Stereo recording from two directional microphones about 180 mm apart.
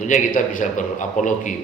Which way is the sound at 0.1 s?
45° left (ahead or behind).